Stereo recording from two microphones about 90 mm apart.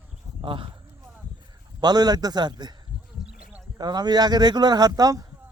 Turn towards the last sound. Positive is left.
turn(degrees=-45)  # may be behind; listen again after turning